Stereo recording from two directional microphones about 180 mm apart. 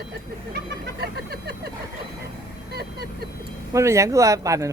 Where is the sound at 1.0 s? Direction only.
60° right (ahead or behind).